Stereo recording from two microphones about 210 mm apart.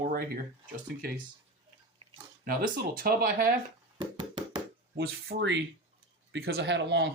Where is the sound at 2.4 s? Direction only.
45° right (ahead or behind).